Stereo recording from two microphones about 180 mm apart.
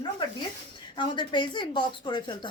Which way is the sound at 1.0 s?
25° left (ahead or behind).